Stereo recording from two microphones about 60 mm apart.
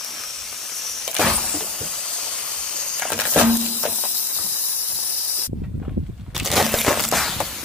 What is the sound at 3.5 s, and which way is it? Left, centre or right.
Music, right.